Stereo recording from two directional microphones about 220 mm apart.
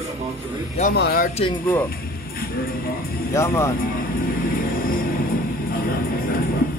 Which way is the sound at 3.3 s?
10° left (ahead or behind).